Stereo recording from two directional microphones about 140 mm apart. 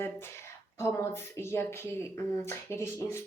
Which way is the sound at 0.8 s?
20° left (ahead or behind).